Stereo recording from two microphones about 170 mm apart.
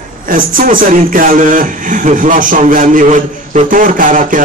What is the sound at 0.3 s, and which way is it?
A man's voice, 55° right (ahead or behind).